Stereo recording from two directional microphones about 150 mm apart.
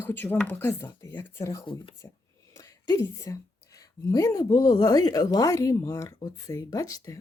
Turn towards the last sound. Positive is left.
turn(degrees=20)  # may be behind; listen again after turning